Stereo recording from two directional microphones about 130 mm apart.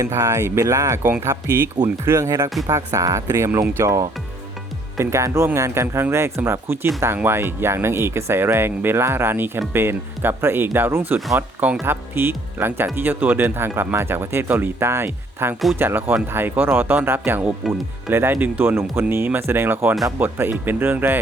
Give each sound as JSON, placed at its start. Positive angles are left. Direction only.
{"t": 0.0, "sound": "speech", "side_deg": -20}